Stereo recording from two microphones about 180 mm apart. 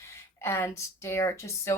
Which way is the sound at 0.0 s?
15° left (ahead or behind).